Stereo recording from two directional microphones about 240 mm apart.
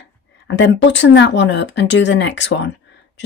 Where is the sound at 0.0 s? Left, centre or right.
Left.